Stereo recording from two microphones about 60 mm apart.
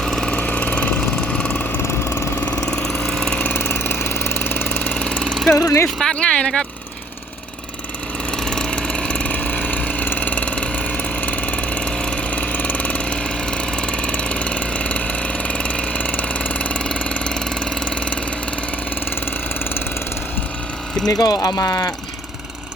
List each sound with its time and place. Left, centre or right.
0.0 s engine: centre
0.3 s vehicle: left
1.8 s engine: left
2.6 s engine: centre
3.5 s engine: left
4.9 s engine: centre
5.5 s speech: left
6.0 s a sound: centre
8.4 s engine: centre
21.1 s speech: left